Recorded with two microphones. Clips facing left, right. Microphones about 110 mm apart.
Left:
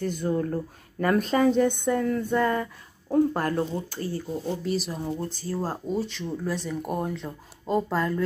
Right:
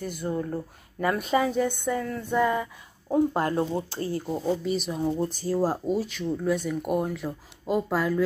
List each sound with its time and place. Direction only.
0.0 s speech: 10° right (ahead or behind)
3.3 s speech: 20° right (ahead or behind)
4.4 s speech: centre (ahead or behind)
5.1 s speech: 15° right (ahead or behind)
5.9 s speech: centre (ahead or behind)